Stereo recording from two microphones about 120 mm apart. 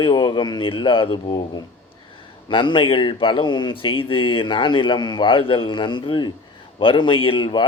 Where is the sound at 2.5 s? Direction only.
45° left (ahead or behind).